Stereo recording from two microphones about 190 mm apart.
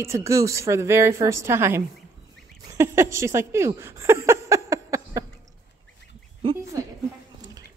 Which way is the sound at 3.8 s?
15° right (ahead or behind).